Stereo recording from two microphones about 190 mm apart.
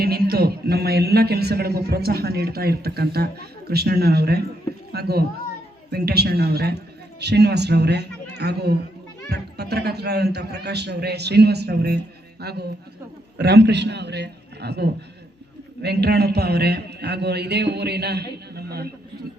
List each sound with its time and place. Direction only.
0.0 s a man's voice: 55° right (ahead or behind)